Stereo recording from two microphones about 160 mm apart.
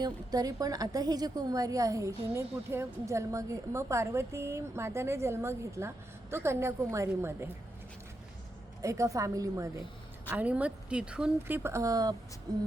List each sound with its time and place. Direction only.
0.0 s a woman's voice: 25° right (ahead or behind)
8.8 s a woman's voice: 20° right (ahead or behind)
10.2 s a woman's voice: 10° right (ahead or behind)